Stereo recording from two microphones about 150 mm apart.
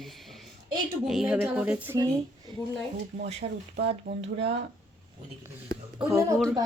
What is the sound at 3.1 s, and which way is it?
Speech, 45° right (ahead or behind).